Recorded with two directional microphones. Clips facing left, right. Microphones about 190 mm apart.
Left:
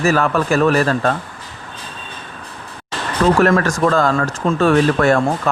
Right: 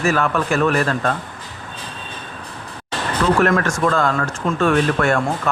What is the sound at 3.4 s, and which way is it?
A man's voice, 35° left (ahead or behind).